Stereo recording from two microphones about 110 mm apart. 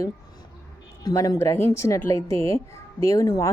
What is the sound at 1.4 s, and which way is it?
Speech, 20° left (ahead or behind).